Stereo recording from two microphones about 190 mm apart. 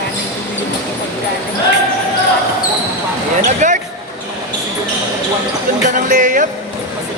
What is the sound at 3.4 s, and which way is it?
Basketball bounce, 40° right (ahead or behind).